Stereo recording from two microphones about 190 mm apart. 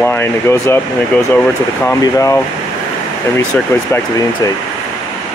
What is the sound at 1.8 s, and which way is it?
Speech, 15° left (ahead or behind).